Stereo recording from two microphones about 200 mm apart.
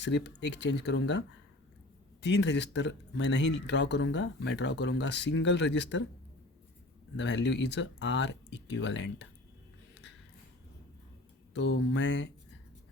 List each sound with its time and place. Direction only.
0.0 s speech: 60° left (ahead or behind)
2.2 s speech: 60° left (ahead or behind)
7.2 s speech: 60° left (ahead or behind)
11.5 s speech: 60° left (ahead or behind)